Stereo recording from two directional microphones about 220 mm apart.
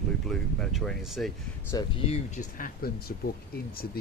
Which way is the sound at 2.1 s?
35° left (ahead or behind).